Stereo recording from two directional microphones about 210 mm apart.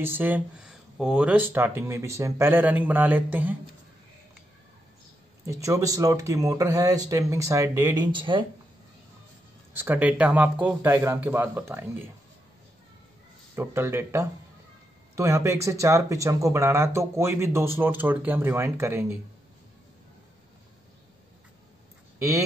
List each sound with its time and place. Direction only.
0.0 s speech: 10° right (ahead or behind)
5.4 s speech: 15° right (ahead or behind)
9.8 s speech: 10° right (ahead or behind)
13.6 s speech: 10° right (ahead or behind)